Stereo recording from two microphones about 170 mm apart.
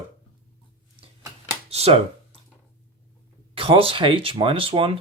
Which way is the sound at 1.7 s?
35° right (ahead or behind).